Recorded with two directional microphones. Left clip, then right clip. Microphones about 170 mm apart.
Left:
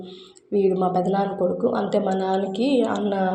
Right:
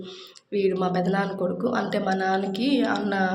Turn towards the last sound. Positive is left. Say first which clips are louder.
# left 2 dB
turn(degrees=15)  # may be behind; listen again after turning